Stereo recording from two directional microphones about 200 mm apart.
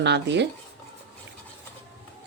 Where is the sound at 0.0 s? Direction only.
60° right (ahead or behind).